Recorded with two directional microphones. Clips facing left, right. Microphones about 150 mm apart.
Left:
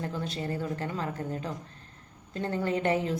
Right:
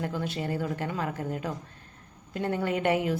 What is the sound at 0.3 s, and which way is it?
Speech, 15° right (ahead or behind).